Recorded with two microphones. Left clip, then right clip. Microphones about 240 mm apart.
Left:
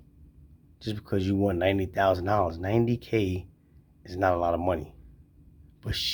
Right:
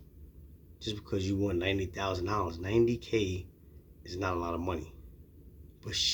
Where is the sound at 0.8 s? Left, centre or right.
Left.